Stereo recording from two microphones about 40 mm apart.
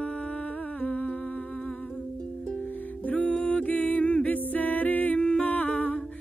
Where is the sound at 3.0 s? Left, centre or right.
Left.